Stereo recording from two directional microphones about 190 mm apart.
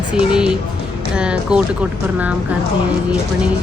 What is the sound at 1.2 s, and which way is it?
Speech, 5° right (ahead or behind).